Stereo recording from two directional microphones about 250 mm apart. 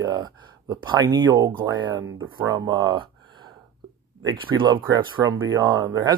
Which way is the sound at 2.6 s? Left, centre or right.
Centre.